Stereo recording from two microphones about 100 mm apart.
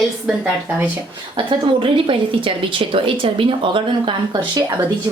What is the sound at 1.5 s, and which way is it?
Speech, 60° right (ahead or behind).